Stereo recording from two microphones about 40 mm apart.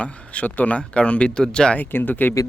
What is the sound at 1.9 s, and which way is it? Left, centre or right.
Speech, left.